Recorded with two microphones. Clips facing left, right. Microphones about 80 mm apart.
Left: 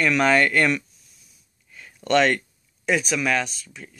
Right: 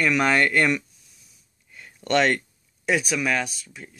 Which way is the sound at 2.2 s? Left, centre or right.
Centre.